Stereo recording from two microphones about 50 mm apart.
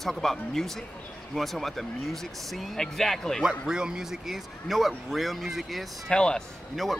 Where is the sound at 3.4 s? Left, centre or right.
Centre.